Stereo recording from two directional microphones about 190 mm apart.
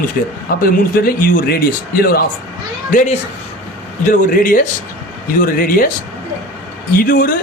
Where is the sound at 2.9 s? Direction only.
40° left (ahead or behind).